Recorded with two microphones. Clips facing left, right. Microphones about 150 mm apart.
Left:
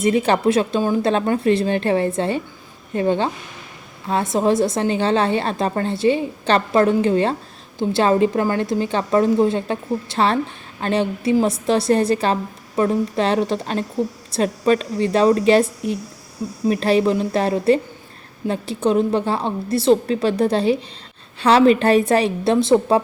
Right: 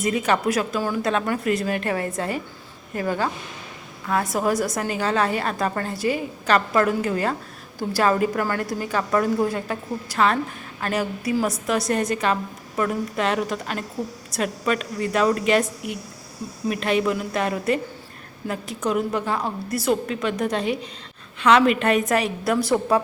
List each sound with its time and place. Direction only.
0.0 s a woman's voice: 30° left (ahead or behind)